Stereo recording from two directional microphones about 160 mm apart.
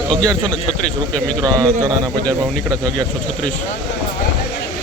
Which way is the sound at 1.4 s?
25° right (ahead or behind).